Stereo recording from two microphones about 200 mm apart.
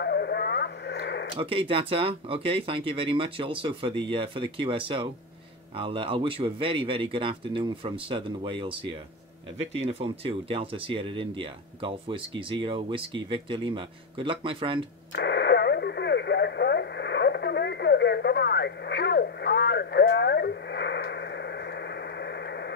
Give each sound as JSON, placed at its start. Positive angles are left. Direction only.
{"t": 0.0, "sound": "radio", "side_deg": 55}
{"t": 1.4, "sound": "speech", "side_deg": -25}
{"t": 15.1, "sound": "radio", "side_deg": 55}